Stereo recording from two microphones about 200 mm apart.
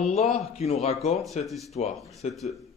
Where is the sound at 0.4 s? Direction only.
30° left (ahead or behind).